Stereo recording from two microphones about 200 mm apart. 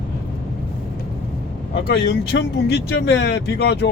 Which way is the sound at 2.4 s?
55° left (ahead or behind).